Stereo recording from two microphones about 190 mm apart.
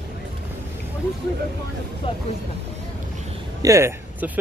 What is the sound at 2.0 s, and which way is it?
Speech, 30° left (ahead or behind).